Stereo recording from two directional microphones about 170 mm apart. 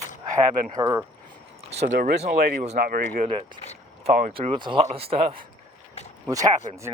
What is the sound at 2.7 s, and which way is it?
Speech, 60° right (ahead or behind).